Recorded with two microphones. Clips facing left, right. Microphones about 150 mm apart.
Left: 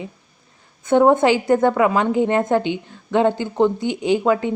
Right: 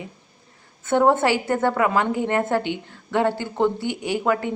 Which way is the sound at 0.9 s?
15° left (ahead or behind).